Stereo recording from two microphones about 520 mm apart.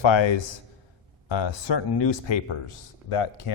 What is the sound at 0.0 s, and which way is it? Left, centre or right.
A man's voice, left.